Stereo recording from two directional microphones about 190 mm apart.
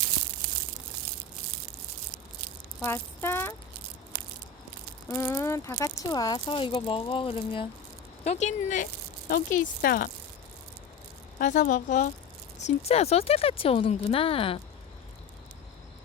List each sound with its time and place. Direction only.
2.8 s speech: 15° left (ahead or behind)
5.0 s speech: 15° left (ahead or behind); by 10.1 s 50° left (ahead or behind)
11.3 s speech: 45° left (ahead or behind)